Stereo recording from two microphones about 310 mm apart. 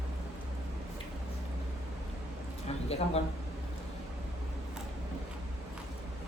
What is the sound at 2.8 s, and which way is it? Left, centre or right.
Speech, centre.